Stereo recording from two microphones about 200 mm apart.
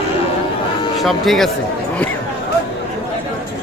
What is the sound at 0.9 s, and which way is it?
Speech, centre (ahead or behind).